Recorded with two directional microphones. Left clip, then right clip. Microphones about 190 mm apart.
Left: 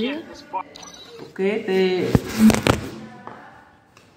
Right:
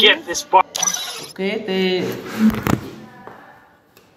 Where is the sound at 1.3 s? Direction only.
30° right (ahead or behind).